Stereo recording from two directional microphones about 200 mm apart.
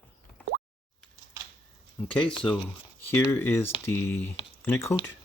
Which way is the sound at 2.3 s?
5° left (ahead or behind).